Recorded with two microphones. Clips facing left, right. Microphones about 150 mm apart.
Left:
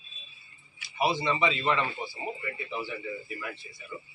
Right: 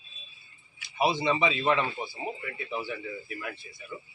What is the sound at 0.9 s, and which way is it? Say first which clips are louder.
Speech: right 1 dB; 20° right (ahead or behind).